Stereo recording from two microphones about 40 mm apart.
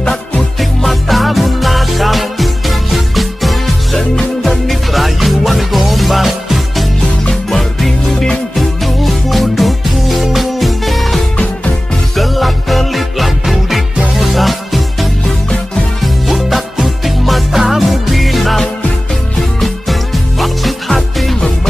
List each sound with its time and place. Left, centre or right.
0.6 s music: centre
4.1 s music: centre
4.5 s music: centre
8.5 s music: centre
12.2 s music: centre